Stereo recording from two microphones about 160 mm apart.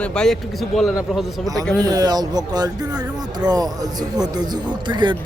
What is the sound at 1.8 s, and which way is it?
Speech, 25° right (ahead or behind).